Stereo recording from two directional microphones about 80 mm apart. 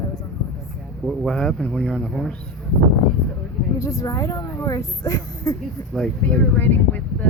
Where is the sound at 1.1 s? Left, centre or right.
Centre.